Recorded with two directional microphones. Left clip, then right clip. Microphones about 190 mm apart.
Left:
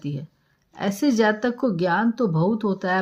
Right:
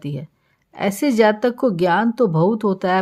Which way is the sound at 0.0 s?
30° right (ahead or behind).